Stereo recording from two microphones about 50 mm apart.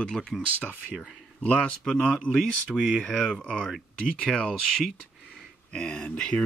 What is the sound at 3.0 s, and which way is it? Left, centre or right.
Speech, centre.